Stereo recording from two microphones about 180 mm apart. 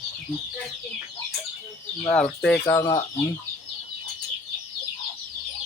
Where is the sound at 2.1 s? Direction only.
5° left (ahead or behind).